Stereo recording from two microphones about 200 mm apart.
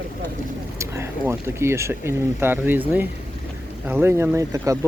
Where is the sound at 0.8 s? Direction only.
10° right (ahead or behind).